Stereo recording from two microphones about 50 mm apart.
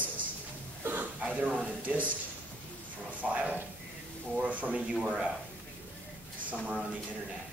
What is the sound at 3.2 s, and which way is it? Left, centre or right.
Speech, right.